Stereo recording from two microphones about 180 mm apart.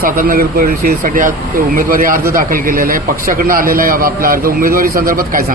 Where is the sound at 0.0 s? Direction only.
55° right (ahead or behind).